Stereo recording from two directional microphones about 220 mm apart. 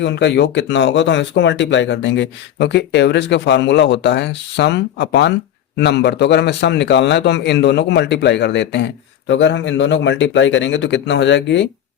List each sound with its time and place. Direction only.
0.0 s speech: 50° left (ahead or behind)